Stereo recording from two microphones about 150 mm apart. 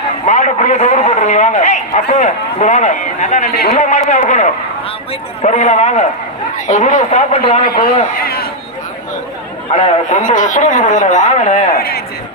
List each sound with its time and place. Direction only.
0.3 s a man's voice: 50° left (ahead or behind)
8.2 s speech: 90° left
9.7 s speech: 55° left (ahead or behind)
11.8 s speech: 90° left